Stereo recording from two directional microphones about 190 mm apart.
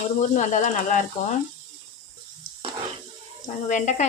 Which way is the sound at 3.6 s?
40° left (ahead or behind).